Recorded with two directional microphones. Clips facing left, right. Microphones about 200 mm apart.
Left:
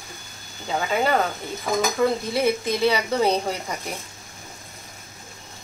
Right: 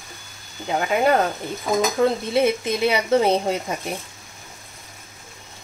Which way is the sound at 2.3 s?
20° right (ahead or behind).